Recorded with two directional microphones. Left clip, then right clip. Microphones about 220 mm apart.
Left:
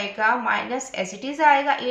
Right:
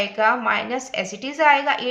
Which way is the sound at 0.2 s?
40° right (ahead or behind).